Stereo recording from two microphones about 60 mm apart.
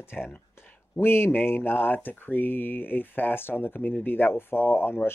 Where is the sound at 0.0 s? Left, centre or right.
Left.